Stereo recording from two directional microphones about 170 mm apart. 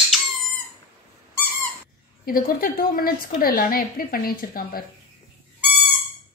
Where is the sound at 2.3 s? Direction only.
60° left (ahead or behind).